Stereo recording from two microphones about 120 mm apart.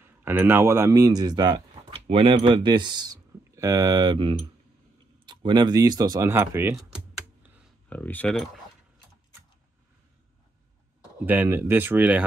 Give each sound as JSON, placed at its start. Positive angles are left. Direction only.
{"t": 0.0, "sound": "speech", "side_deg": -20}
{"t": 1.9, "sound": "speech", "side_deg": -50}
{"t": 6.3, "sound": "speech", "side_deg": -20}
{"t": 7.9, "sound": "speech", "side_deg": 15}
{"t": 11.2, "sound": "speech", "side_deg": -15}